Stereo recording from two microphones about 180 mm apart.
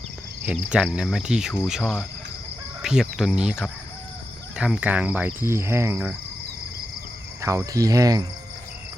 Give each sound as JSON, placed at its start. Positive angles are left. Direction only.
{"t": 0.4, "sound": "speech", "side_deg": -5}
{"t": 4.5, "sound": "fowl", "side_deg": -5}
{"t": 7.4, "sound": "cricket", "side_deg": -15}